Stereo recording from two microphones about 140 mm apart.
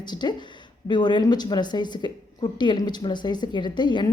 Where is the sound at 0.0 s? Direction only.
30° left (ahead or behind).